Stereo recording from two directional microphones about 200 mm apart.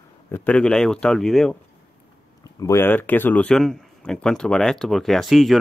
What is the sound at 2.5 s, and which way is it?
Speech, 15° left (ahead or behind).